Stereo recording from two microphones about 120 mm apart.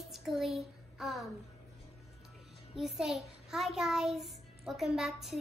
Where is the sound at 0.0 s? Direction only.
Centre (ahead or behind).